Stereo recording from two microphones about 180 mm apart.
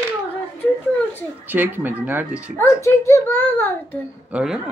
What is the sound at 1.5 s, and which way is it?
Speech, 10° right (ahead or behind).